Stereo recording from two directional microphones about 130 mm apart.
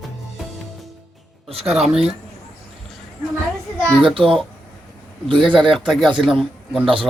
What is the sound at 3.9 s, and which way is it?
Speech, centre (ahead or behind).